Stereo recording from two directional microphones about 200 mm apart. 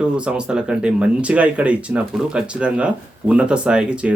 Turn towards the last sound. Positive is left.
turn(degrees=-5)  # may be behind; listen again after turning